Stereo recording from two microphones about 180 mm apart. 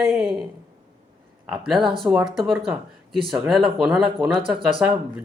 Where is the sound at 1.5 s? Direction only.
Centre (ahead or behind).